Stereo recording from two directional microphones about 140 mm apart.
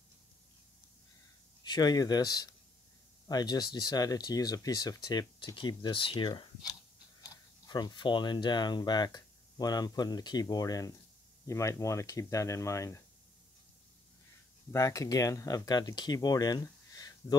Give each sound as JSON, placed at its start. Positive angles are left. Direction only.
{"t": 1.6, "sound": "speech", "side_deg": 30}
{"t": 14.7, "sound": "speech", "side_deg": 25}